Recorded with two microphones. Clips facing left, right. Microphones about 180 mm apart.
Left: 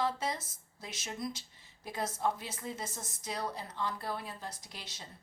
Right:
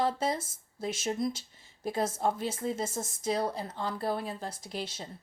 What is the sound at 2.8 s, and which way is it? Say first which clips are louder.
Speech: right 10 dB; 50° right (ahead or behind).